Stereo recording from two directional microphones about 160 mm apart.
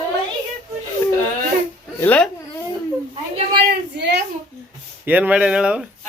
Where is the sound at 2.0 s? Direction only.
10° left (ahead or behind).